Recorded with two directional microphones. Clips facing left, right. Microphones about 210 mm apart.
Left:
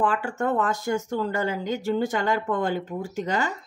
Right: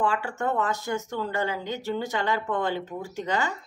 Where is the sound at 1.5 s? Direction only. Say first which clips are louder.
Left 4 dB; 45° left (ahead or behind).